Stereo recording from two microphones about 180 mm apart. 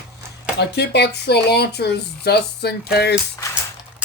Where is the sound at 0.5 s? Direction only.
65° left (ahead or behind).